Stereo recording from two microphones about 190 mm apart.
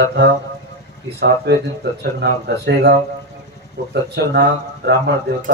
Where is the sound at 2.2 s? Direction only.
60° right (ahead or behind).